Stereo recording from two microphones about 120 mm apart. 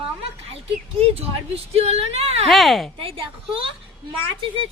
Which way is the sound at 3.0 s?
50° right (ahead or behind).